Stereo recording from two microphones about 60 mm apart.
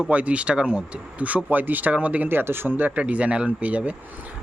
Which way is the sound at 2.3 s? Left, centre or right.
Right.